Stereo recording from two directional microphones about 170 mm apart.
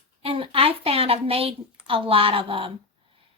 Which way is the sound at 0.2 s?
35° right (ahead or behind).